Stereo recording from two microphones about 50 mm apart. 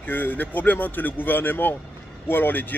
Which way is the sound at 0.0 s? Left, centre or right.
Left.